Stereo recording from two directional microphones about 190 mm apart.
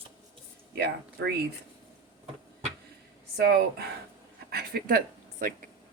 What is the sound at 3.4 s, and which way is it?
A woman's voice, 60° right (ahead or behind).